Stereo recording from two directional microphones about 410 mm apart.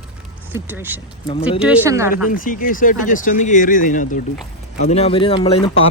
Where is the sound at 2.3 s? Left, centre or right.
Centre.